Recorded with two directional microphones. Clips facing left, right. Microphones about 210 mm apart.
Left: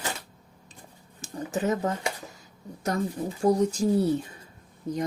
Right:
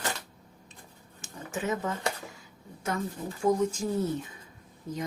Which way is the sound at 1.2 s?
40° left (ahead or behind).